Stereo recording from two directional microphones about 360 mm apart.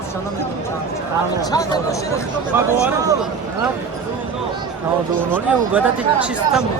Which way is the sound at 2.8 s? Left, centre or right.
Centre.